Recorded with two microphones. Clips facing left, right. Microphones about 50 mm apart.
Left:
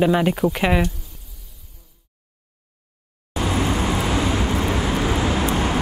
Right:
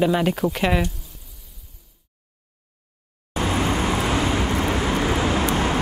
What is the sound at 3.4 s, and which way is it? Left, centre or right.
Vehicle, centre.